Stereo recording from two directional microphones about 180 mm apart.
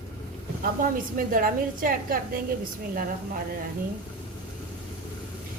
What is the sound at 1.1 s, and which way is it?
A woman's voice, 50° right (ahead or behind).